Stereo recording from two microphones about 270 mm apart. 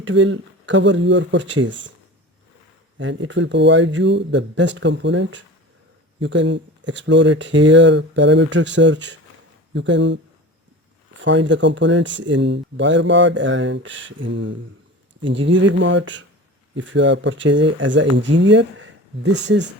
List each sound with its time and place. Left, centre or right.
0.0 s speech: right
3.0 s speech: right
11.2 s speech: right